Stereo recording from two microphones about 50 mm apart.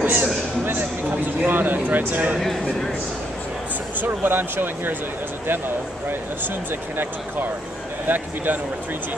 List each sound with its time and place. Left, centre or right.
0.0 s a sound: right
4.0 s speech: right
8.1 s speech: right